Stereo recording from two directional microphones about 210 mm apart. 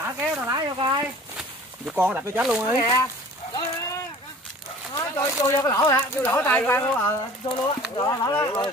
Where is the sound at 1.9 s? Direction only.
10° right (ahead or behind).